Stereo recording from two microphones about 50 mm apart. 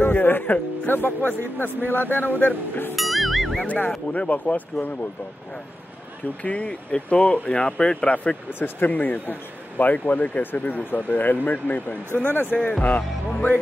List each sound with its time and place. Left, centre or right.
0.0 s speech: left
3.0 s music: centre
3.6 s speech: left
6.4 s speech: left
8.5 s speech: left
12.5 s speech: centre
12.8 s speech: left